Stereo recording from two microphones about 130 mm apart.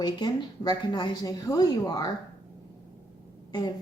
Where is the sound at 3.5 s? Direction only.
35° left (ahead or behind).